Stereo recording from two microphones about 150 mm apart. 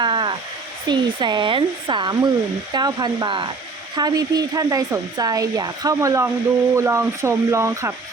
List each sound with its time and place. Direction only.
0.0 s hair dryer: 30° right (ahead or behind)
0.9 s speech: 30° right (ahead or behind)